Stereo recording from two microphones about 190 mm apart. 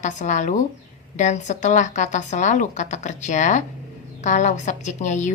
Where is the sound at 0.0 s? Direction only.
40° left (ahead or behind).